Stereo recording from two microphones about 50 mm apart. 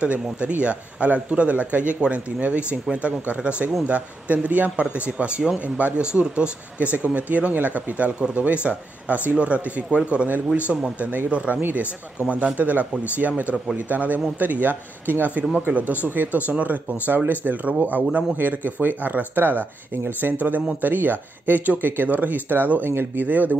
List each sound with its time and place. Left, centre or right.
0.0 s a man's voice: right
22.8 s speech: right
23.2 s speech: right